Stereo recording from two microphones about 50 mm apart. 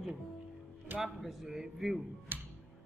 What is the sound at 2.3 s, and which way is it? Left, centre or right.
Music, right.